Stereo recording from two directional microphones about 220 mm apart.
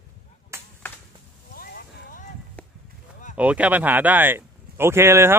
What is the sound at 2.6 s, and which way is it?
Chop, 5° left (ahead or behind).